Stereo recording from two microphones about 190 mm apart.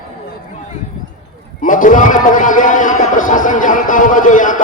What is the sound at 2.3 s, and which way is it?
A man's voice, 45° left (ahead or behind).